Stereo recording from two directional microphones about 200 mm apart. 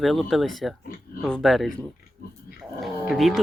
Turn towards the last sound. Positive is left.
turn(degrees=0)  # may be behind; listen again after turning